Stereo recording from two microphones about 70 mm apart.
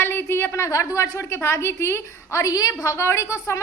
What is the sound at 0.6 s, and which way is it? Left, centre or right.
A woman's voice, left.